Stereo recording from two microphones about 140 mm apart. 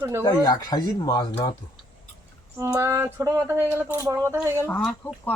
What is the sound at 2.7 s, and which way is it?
Speech, 15° right (ahead or behind).